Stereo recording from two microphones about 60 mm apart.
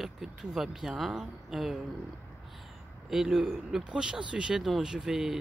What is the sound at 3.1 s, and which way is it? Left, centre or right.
Speech, centre.